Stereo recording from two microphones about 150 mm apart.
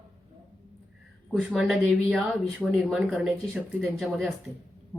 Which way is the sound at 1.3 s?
Centre (ahead or behind).